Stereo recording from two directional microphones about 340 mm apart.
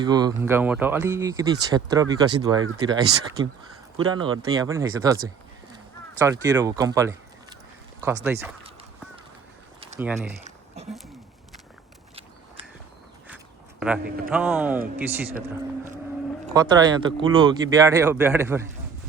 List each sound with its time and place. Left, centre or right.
0.0 s speech: centre
6.2 s speech: centre
10.0 s speech: centre
13.2 s a sound: centre
14.3 s speech: centre
15.3 s speech: right
16.6 s speech: centre